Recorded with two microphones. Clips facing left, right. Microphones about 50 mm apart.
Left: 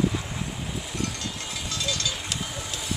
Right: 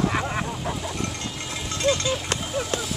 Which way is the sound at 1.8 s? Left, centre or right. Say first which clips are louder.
Right 8 dB; right.